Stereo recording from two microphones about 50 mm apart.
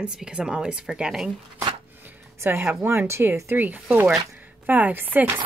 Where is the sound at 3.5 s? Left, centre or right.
Right.